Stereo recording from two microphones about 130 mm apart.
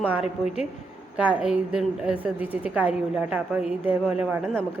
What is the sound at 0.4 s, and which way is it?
Speech, 55° left (ahead or behind).